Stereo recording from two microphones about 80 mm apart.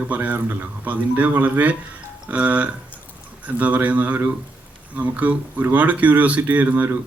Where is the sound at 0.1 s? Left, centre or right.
Right.